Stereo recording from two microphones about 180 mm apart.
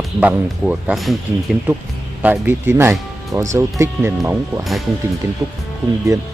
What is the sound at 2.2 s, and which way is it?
Speech, 10° right (ahead or behind).